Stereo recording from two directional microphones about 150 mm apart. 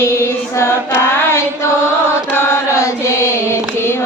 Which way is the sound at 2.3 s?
15° left (ahead or behind).